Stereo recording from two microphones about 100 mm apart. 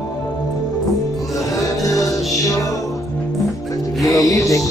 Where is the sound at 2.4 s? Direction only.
35° left (ahead or behind).